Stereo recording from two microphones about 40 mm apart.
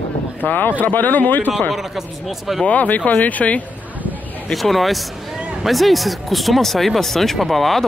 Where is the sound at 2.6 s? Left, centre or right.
Left.